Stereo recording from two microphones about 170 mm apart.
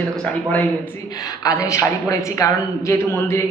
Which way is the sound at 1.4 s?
20° left (ahead or behind).